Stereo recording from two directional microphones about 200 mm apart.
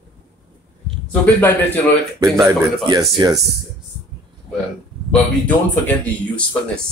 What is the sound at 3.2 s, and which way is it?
Speech, 20° right (ahead or behind).